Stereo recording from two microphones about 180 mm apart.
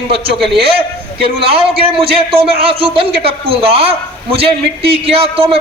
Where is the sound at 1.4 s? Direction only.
30° right (ahead or behind).